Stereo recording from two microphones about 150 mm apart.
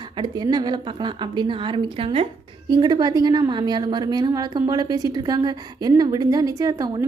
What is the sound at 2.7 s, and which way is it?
Speech, 30° right (ahead or behind).